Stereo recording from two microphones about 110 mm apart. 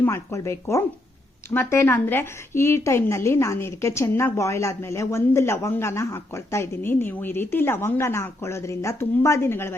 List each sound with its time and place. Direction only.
0.0 s a woman's voice: 25° left (ahead or behind)